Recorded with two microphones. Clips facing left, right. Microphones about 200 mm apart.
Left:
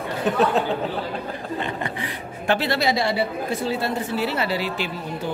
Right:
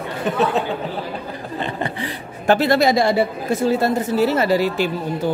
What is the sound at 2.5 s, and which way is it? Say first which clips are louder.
Speech: right 7 dB; 45° right (ahead or behind).